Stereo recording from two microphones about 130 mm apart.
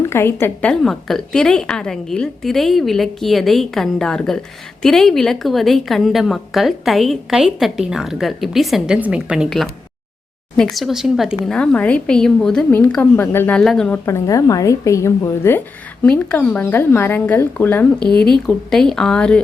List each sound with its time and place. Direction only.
0.0 s a woman's voice: 20° left (ahead or behind)
14.0 s a woman's voice: 25° left (ahead or behind)
18.4 s a woman's voice: 5° left (ahead or behind)